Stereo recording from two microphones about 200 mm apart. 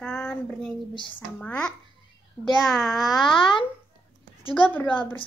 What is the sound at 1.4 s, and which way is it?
A child's voice, 5° left (ahead or behind).